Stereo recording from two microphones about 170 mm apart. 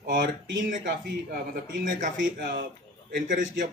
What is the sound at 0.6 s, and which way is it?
A man's voice, 50° right (ahead or behind).